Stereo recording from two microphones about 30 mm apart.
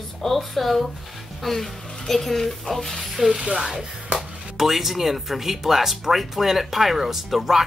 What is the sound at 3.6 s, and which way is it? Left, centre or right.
Speech, centre.